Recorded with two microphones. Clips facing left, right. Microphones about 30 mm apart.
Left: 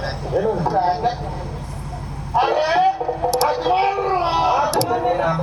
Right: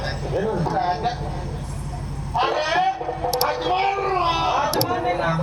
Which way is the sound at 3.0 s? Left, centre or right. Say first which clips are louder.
Left 4 dB; centre.